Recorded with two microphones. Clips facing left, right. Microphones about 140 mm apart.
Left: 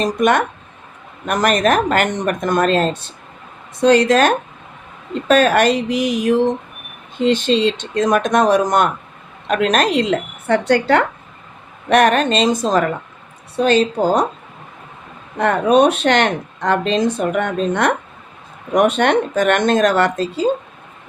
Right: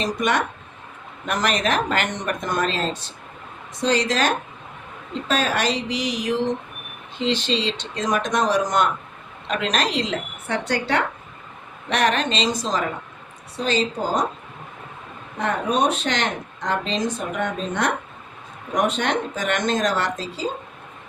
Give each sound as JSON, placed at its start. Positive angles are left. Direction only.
{"t": 0.0, "sound": "speech", "side_deg": 50}
{"t": 15.4, "sound": "speech", "side_deg": 65}